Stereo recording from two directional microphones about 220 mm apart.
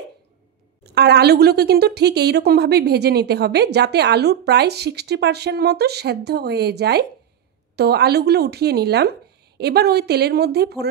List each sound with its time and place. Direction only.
0.8 s a woman's voice: 50° right (ahead or behind)